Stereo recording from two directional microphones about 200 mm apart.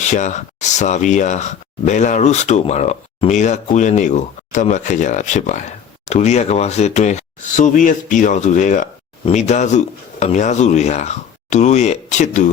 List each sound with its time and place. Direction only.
0.0 s speech: 35° left (ahead or behind)